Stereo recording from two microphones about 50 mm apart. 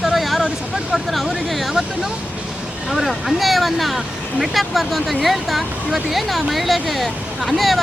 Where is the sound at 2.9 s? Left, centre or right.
Centre.